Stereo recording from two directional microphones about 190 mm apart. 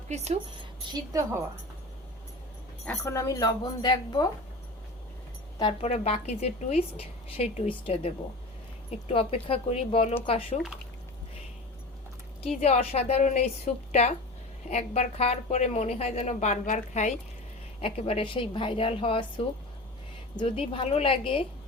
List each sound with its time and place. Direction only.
0.9 s a woman's voice: 20° right (ahead or behind)
2.8 s speech: 15° left (ahead or behind)
5.8 s a woman's voice: 35° left (ahead or behind)
8.9 s a woman's voice: 35° left (ahead or behind)
12.4 s a woman's voice: 35° left (ahead or behind)